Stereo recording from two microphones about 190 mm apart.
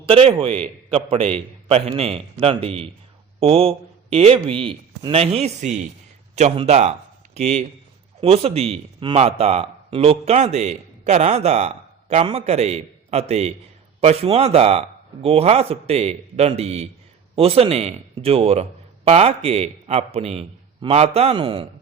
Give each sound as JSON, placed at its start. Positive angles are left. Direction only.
{"t": 0.1, "sound": "a man's voice", "side_deg": -30}
{"t": 1.6, "sound": "speech", "side_deg": -30}